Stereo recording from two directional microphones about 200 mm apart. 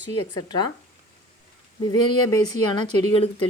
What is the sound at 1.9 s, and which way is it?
Speech, 20° left (ahead or behind).